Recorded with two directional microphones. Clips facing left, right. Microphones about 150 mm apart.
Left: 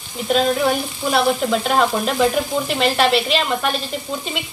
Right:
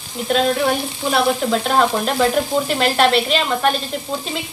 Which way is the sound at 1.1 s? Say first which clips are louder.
Even; centre (ahead or behind).